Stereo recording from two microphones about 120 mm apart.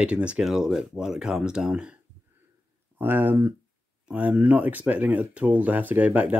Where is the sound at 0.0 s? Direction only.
10° right (ahead or behind).